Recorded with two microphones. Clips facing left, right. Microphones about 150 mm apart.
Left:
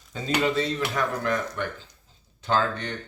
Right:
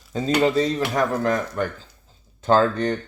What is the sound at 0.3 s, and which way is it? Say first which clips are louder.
Speech: right 5 dB; 35° right (ahead or behind).